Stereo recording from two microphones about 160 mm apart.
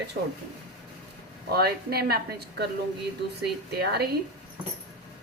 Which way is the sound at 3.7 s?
90° right.